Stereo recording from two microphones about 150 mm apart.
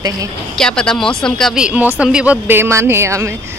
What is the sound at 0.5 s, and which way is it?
Speech, 5° left (ahead or behind).